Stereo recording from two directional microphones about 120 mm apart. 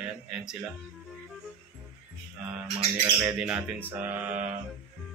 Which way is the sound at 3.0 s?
10° right (ahead or behind).